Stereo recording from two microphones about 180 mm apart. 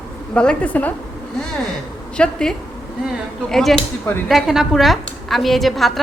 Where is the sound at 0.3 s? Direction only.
5° left (ahead or behind).